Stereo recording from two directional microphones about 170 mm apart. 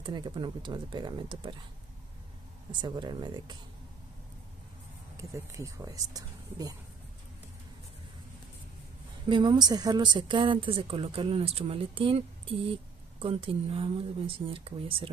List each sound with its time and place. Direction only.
0.0 s speech: 25° right (ahead or behind)
2.8 s speech: 25° right (ahead or behind)
5.1 s speech: 20° right (ahead or behind)
9.3 s speech: 25° right (ahead or behind)